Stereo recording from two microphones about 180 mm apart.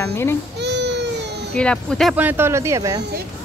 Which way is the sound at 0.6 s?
70° right (ahead or behind).